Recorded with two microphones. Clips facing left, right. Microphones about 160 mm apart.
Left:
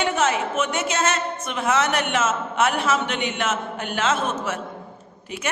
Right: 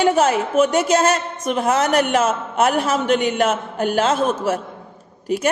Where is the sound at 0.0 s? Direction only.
35° right (ahead or behind).